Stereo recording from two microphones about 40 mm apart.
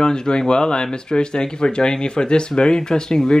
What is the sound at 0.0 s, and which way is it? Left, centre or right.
Speech, left.